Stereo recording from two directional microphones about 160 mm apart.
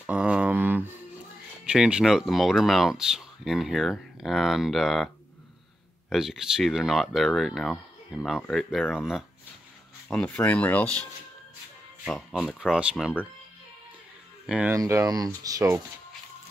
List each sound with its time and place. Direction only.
0.0 s a sound: 5° right (ahead or behind)
1.7 s speech: 5° right (ahead or behind)
12.1 s speech: centre (ahead or behind)
14.4 s speech: 5° right (ahead or behind)
14.7 s speech: 15° right (ahead or behind)